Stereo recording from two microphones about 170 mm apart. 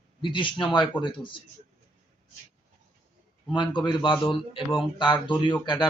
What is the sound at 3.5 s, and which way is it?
A man's voice, 25° left (ahead or behind).